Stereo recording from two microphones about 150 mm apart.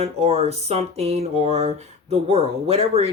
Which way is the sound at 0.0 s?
45° right (ahead or behind).